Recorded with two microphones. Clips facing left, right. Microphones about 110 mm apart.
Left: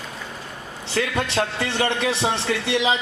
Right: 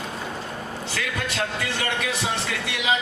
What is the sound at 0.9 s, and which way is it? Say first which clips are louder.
A man's voice: left 8 dB; 30° left (ahead or behind).